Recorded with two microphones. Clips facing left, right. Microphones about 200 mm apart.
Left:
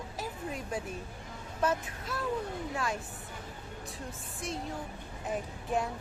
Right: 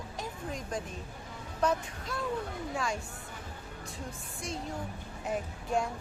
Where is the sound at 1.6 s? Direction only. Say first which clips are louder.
Right 1 dB; 5° left (ahead or behind).